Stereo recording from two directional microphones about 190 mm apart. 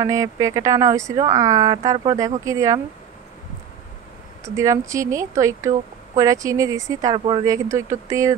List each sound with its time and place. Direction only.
0.0 s speech: 15° right (ahead or behind)
4.6 s speech: 15° right (ahead or behind)